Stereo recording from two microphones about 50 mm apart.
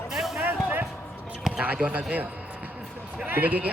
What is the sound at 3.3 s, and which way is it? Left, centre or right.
Speech, right.